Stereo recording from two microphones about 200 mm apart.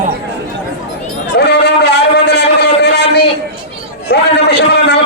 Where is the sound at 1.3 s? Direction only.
55° left (ahead or behind).